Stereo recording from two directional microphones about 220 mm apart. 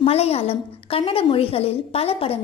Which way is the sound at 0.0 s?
30° left (ahead or behind).